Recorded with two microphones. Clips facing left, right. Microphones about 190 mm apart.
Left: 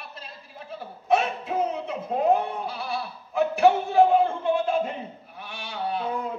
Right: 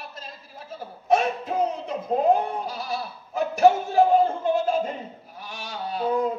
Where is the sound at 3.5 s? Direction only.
40° right (ahead or behind).